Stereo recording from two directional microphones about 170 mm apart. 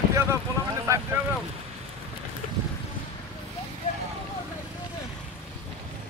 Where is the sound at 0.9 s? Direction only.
20° right (ahead or behind).